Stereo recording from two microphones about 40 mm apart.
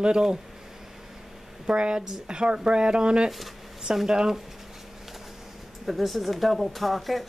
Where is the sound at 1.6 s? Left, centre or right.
Right.